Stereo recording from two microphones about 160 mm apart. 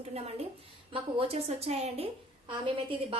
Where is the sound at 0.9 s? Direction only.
35° right (ahead or behind).